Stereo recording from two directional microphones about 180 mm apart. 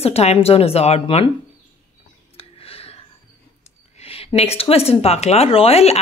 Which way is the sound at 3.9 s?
35° left (ahead or behind).